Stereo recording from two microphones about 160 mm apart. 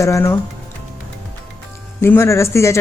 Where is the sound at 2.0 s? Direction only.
15° left (ahead or behind).